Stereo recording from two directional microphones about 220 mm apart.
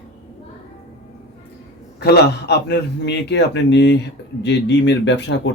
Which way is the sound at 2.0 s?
50° left (ahead or behind).